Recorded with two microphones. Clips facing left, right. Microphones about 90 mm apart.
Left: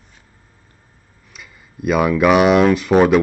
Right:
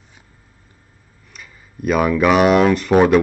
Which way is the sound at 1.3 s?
5° left (ahead or behind).